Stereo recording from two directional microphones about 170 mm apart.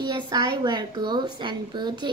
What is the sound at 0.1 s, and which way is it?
A woman's voice, 25° right (ahead or behind).